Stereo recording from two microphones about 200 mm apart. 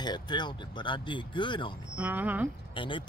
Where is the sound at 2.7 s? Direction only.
25° left (ahead or behind).